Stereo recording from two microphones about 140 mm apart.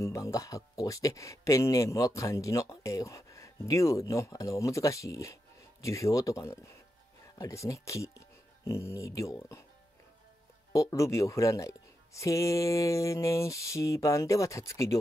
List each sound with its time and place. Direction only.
0.0 s speech: 20° left (ahead or behind)
10.7 s speech: 25° left (ahead or behind)